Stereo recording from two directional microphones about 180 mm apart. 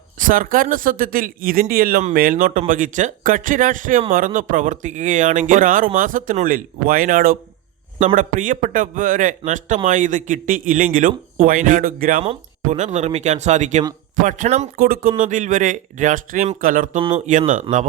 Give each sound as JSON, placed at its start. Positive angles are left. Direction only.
{"t": 0.2, "sound": "a man's voice", "side_deg": -50}
{"t": 12.2, "sound": "a man's voice", "side_deg": -35}
{"t": 14.8, "sound": "a man's voice", "side_deg": -55}
{"t": 17.0, "sound": "speech", "side_deg": -30}
{"t": 17.2, "sound": "a man's voice", "side_deg": -45}